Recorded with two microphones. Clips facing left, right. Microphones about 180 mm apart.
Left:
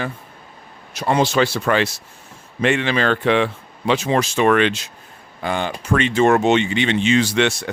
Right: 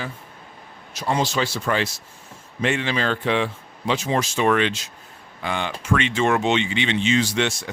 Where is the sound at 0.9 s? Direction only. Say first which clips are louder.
Left 5 dB; 65° left (ahead or behind).